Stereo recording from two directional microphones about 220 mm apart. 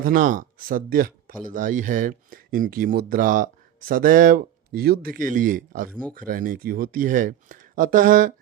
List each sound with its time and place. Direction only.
0.0 s speech: 40° right (ahead or behind)